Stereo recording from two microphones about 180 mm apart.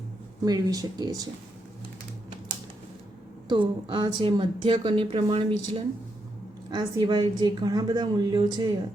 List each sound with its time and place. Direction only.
0.4 s speech: 20° right (ahead or behind)
3.5 s speech: 25° right (ahead or behind)